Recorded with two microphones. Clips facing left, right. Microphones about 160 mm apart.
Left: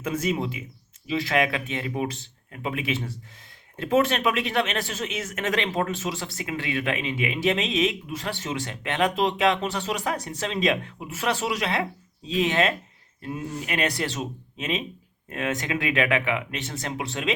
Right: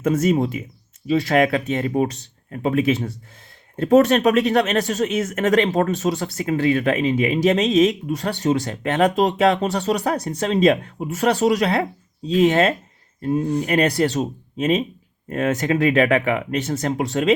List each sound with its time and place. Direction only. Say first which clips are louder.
0.0 s speech: right 8 dB; 45° right (ahead or behind)